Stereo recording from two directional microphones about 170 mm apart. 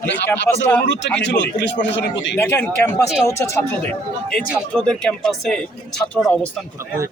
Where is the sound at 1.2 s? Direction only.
90° left.